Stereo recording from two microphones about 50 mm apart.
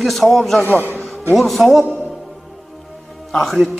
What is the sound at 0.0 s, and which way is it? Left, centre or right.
A man's voice, centre.